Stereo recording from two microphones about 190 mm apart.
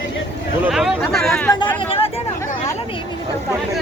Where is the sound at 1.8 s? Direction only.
30° left (ahead or behind).